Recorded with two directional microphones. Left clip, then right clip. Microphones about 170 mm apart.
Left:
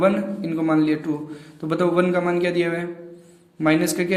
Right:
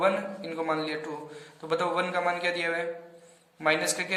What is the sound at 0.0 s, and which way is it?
A man's voice, 30° left (ahead or behind).